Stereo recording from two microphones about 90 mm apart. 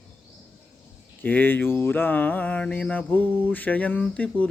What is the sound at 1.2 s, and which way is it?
Mantra, 20° left (ahead or behind).